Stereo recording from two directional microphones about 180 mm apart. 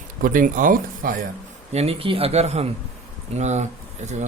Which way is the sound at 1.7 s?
35° right (ahead or behind).